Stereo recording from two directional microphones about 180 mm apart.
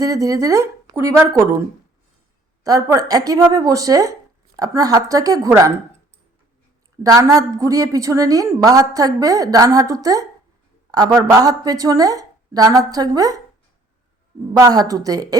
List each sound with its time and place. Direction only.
0.0 s speech: 20° right (ahead or behind)
2.6 s a woman's voice: 20° right (ahead or behind)
7.0 s a woman's voice: 20° right (ahead or behind)
14.6 s a woman's voice: 20° right (ahead or behind)